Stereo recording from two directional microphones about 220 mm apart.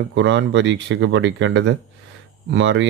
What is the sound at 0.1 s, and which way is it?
Speech, 55° right (ahead or behind).